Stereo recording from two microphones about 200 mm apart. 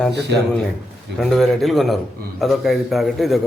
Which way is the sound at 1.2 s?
Centre (ahead or behind).